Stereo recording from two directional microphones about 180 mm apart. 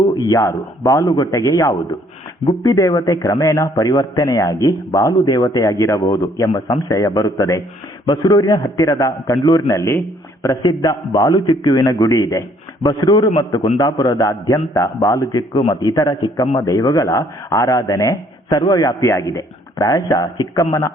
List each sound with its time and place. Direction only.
0.2 s a man's voice: 15° left (ahead or behind)
15.3 s a man's voice: 25° left (ahead or behind)